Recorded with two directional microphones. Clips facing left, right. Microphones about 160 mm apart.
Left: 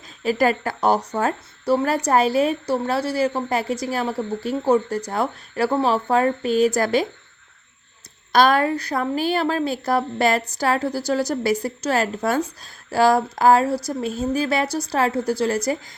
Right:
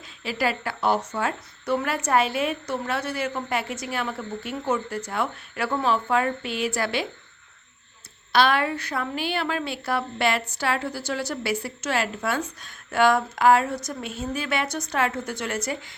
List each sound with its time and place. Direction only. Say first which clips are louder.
0.2 s speech: left 7 dB; 45° left (ahead or behind)
8.3 s speech: left 4 dB; 45° left (ahead or behind)